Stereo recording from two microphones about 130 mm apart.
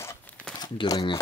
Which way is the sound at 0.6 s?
30° left (ahead or behind).